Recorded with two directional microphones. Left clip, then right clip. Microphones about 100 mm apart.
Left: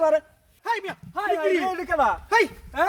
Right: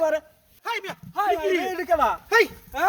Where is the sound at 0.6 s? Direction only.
40° right (ahead or behind).